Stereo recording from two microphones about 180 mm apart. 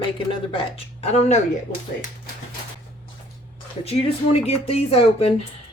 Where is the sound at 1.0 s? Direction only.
40° left (ahead or behind).